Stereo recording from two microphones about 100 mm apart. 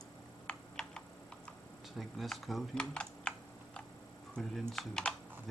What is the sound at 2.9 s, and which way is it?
Typing, 10° left (ahead or behind).